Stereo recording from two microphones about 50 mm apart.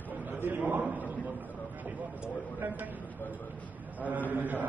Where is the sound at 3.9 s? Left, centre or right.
Right.